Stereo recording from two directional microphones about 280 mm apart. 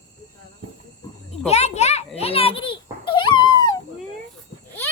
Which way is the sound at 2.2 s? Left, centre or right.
Left.